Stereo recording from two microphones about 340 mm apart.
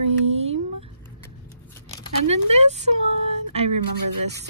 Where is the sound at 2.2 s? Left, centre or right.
Centre.